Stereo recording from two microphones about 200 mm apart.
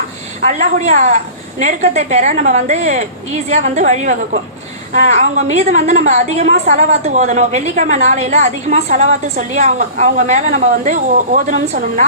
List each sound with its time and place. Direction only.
0.4 s a woman's voice: 35° right (ahead or behind)